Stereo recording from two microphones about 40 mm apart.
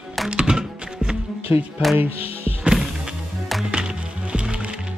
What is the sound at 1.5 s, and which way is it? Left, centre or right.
Music, right.